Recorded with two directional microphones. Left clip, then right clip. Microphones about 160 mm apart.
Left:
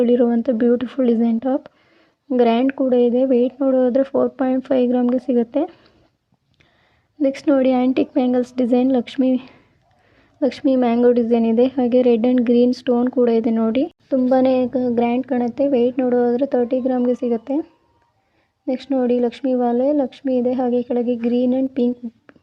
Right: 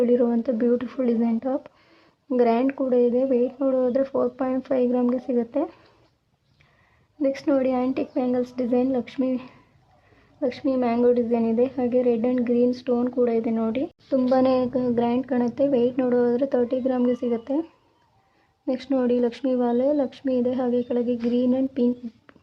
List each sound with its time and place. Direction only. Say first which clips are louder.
0.0 s speech: left 4 dB; 30° left (ahead or behind)
7.2 s speech: left 5 dB; 35° left (ahead or behind)
14.3 s speech: left 4 dB; 25° left (ahead or behind)
18.6 s speech: left 4 dB; 20° left (ahead or behind)